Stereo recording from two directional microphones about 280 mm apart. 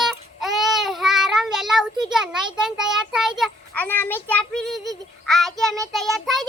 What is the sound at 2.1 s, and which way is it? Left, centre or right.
A child's voice, centre.